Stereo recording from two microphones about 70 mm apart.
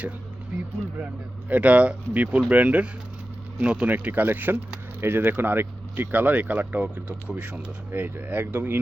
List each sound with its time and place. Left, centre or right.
1.5 s speech: centre